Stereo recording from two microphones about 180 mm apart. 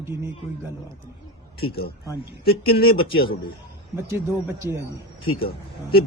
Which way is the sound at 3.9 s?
15° right (ahead or behind).